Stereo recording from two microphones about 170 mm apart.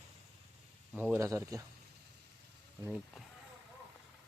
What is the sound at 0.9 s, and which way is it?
Speech, 10° right (ahead or behind).